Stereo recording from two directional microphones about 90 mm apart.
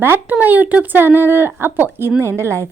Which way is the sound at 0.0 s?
25° right (ahead or behind).